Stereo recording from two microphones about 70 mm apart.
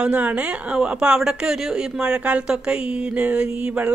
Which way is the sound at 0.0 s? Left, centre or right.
Centre.